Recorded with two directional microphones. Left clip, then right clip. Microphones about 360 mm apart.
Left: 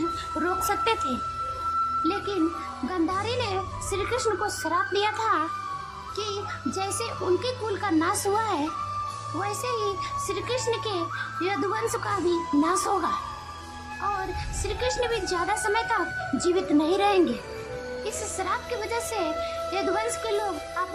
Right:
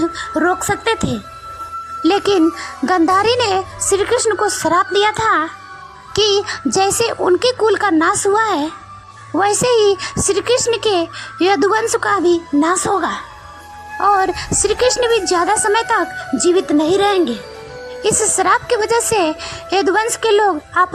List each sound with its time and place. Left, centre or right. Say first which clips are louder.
0.3 s a woman's voice: right 10 dB; centre
2.0 s a woman's voice: right 13 dB; right
14.6 s a woman's voice: right 13 dB; centre